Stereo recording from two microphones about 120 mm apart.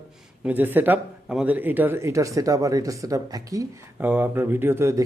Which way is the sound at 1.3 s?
5° right (ahead or behind).